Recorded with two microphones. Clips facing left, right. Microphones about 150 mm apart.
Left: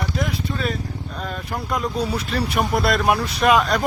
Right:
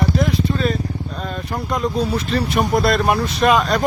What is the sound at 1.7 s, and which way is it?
Speech, 10° left (ahead or behind).